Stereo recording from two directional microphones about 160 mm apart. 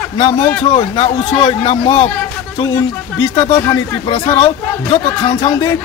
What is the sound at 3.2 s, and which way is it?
Speech, 20° left (ahead or behind).